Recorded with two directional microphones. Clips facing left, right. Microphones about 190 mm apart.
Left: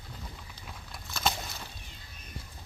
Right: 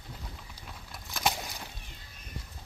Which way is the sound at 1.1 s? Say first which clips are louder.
Right 1 dB; 15° right (ahead or behind).